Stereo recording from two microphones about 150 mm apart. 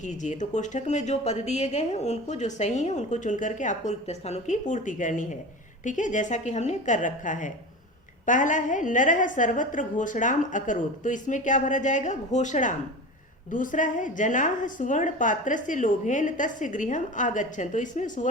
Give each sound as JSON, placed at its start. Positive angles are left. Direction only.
{"t": 0.0, "sound": "a woman's voice", "side_deg": 55}